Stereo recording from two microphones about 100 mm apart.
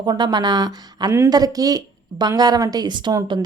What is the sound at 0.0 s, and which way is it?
A woman's voice, 45° right (ahead or behind).